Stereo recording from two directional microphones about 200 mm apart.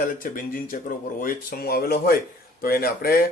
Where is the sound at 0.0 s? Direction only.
45° left (ahead or behind).